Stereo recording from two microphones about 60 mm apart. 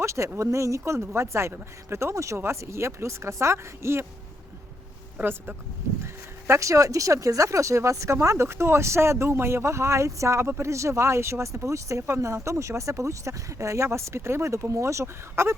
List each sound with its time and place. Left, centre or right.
0.0 s speech: right
5.2 s speech: right
6.5 s speech: right